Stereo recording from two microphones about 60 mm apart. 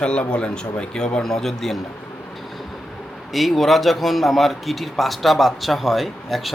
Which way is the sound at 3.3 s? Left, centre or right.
Centre.